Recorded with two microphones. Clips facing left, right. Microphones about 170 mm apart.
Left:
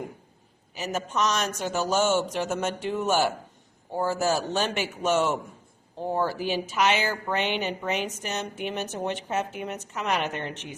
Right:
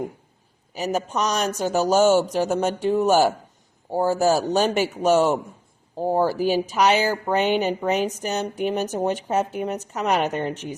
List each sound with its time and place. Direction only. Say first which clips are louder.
0.7 s speech: right 5 dB; 40° right (ahead or behind)
4.4 s speech: right 7 dB; 40° right (ahead or behind)